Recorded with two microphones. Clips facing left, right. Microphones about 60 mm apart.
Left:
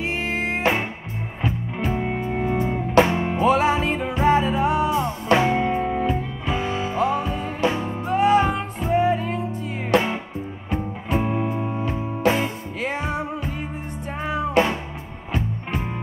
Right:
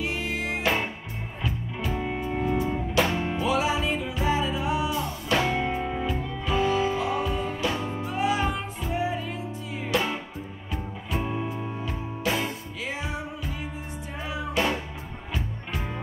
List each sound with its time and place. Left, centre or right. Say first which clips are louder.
0.0 s music: left 4 dB; left
7.0 s music: left 4 dB; left
9.9 s music: left 7 dB; left
12.8 s music: left 7 dB; left